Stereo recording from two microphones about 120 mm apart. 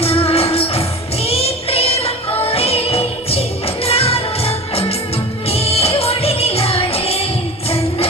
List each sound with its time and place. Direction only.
0.0 s music: 55° left (ahead or behind)